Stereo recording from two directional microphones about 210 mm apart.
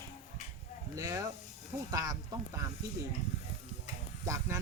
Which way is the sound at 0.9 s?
15° right (ahead or behind).